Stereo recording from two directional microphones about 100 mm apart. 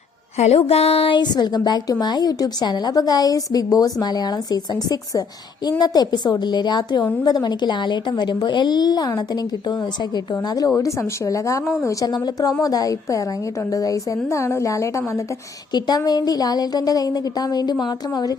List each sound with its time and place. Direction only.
0.3 s a woman's voice: 90° left; by 15.2 s 30° left (ahead or behind)
15.7 s a woman's voice: 40° left (ahead or behind)